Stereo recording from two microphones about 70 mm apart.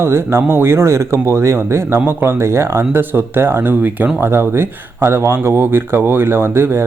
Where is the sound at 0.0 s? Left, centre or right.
Right.